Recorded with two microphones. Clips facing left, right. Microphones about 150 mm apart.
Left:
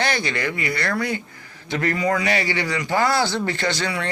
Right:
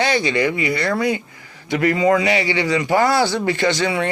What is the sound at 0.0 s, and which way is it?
A man's voice, 20° right (ahead or behind).